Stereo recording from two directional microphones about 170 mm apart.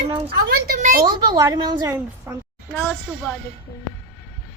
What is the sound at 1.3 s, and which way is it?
A child's voice, 25° right (ahead or behind).